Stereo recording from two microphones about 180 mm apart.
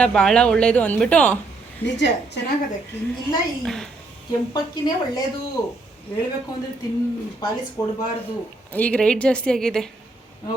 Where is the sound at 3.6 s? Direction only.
5° left (ahead or behind).